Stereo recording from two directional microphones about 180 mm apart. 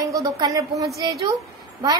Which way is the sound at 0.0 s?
20° right (ahead or behind).